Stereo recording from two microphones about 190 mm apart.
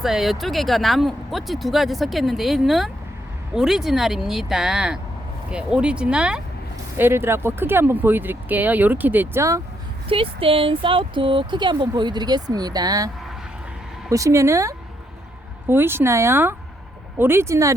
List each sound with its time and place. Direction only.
0.0 s speech: centre (ahead or behind)
10.1 s speech: 30° right (ahead or behind)
14.1 s speech: 15° right (ahead or behind)